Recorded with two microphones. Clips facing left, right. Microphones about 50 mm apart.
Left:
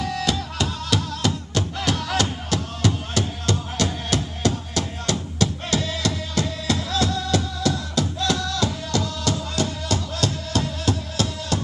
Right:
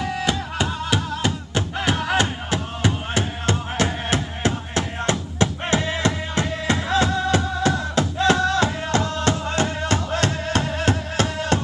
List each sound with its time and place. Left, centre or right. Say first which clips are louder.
0.0 s music: right 1 dB; centre; by 11.6 s right